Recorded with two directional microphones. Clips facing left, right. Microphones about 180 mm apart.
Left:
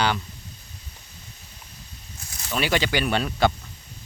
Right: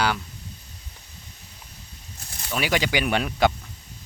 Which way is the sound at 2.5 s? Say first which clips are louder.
Left 1 dB; 10° right (ahead or behind).